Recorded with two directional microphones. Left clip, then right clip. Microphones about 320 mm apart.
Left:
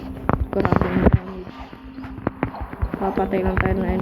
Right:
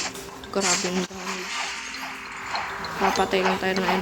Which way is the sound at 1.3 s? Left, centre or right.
Right.